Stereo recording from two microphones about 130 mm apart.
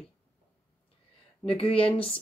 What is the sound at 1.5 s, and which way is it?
Speech, 45° left (ahead or behind).